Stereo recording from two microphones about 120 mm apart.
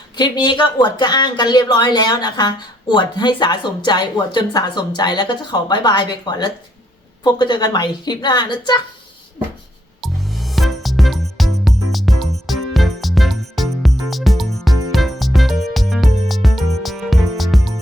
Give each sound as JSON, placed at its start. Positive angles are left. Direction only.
{"t": 0.2, "sound": "speech", "side_deg": 40}
{"t": 10.0, "sound": "music", "side_deg": 0}